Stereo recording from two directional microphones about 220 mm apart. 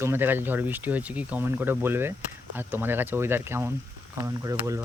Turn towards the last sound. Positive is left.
turn(degrees=-15)  # may be behind; listen again after turning